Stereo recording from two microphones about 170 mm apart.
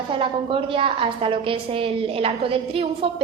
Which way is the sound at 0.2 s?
30° right (ahead or behind).